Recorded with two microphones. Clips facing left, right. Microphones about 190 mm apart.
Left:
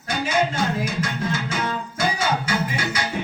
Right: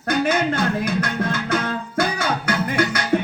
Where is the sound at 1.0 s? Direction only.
55° right (ahead or behind).